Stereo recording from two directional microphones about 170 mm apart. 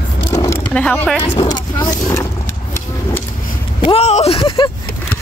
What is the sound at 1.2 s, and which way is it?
Speech, 35° left (ahead or behind).